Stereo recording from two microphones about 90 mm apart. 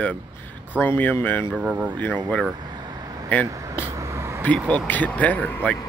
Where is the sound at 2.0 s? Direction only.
20° left (ahead or behind).